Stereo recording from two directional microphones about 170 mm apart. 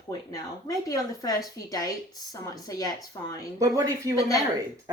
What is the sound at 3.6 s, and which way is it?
Speech, 20° right (ahead or behind).